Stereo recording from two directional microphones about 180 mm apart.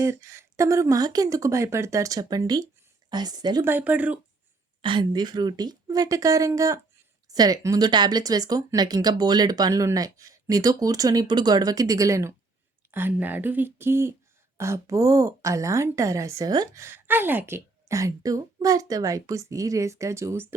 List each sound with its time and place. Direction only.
0.0 s a woman's voice: 15° right (ahead or behind)
3.7 s a woman's voice: 10° right (ahead or behind)
4.8 s a woman's voice: 25° right (ahead or behind)